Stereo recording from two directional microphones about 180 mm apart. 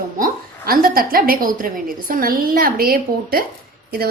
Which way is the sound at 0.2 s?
55° right (ahead or behind).